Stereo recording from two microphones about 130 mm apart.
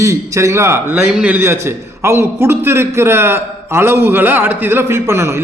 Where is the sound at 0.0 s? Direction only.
25° right (ahead or behind).